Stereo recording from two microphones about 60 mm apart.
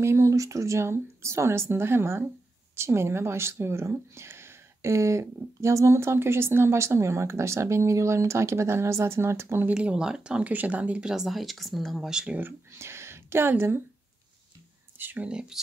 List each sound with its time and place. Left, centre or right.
0.0 s speech: right
9.8 s speech: centre
10.4 s speech: right
11.2 s speech: centre
12.1 s speech: centre
12.7 s speech: right
15.0 s speech: right
15.2 s speech: centre